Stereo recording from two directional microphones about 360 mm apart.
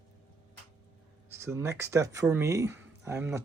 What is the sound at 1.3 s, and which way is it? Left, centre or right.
Speech, centre.